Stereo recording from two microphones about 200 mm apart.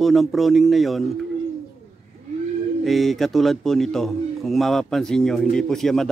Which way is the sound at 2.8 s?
Centre (ahead or behind).